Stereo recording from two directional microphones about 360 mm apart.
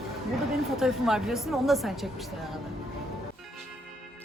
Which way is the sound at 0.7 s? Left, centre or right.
Centre.